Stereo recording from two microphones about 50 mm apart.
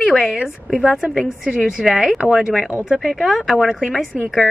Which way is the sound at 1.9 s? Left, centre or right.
Centre.